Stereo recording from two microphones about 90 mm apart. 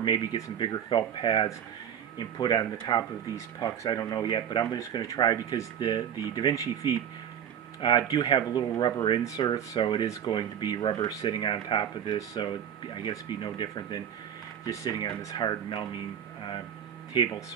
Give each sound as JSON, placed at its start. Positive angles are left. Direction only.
{"t": 0.0, "sound": "speech", "side_deg": 60}
{"t": 8.1, "sound": "speech", "side_deg": 55}
{"t": 11.0, "sound": "speech", "side_deg": 40}
{"t": 11.2, "sound": "speech", "side_deg": 60}
{"t": 14.7, "sound": "speech", "side_deg": 35}
{"t": 15.0, "sound": "speech", "side_deg": 55}
{"t": 17.1, "sound": "speech", "side_deg": 65}